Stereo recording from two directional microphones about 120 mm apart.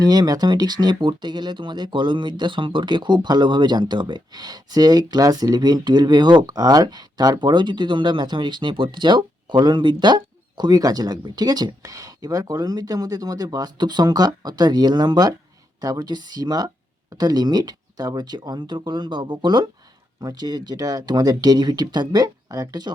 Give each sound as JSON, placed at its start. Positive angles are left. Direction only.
{"t": 0.0, "sound": "speech", "side_deg": -35}